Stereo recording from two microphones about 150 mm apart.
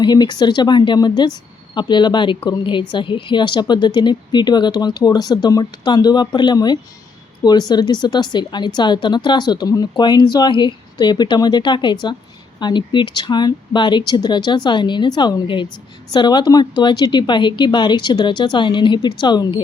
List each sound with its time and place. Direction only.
0.0 s a woman's voice: 30° left (ahead or behind)